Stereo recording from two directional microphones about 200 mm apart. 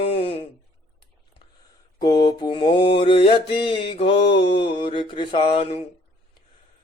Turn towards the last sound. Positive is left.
turn(degrees=25)  # may be behind; listen again after turning